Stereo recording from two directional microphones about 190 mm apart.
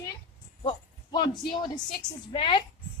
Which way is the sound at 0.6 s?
20° left (ahead or behind).